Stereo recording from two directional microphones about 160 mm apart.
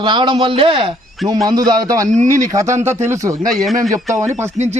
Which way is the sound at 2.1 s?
50° right (ahead or behind).